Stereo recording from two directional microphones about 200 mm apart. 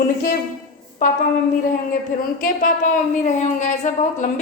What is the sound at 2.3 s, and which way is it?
Speech, 40° left (ahead or behind).